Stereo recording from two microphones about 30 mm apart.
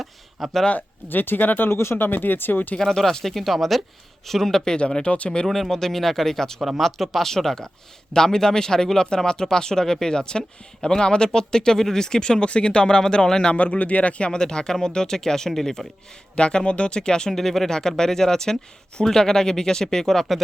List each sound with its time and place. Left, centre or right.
0.0 s a sound: centre
0.8 s speech: left
2.8 s speech: centre
5.0 s speech: left
5.5 s speech: centre
6.7 s speech: centre; by 13.5 s left
13.6 s speech: left
14.3 s speech: left
16.3 s speech: left
17.3 s speech: centre
17.7 s speech: centre